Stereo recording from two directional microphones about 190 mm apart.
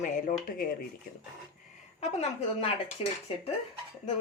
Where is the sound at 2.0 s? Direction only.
35° left (ahead or behind).